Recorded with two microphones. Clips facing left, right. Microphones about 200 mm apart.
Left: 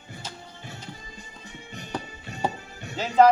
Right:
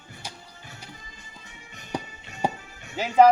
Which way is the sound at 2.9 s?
10° right (ahead or behind).